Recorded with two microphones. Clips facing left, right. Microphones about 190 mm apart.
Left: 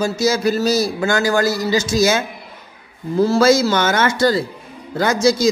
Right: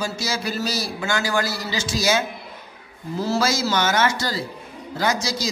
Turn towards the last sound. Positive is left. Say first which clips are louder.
# left 8 dB
turn(degrees=55)  # may be behind; listen again after turning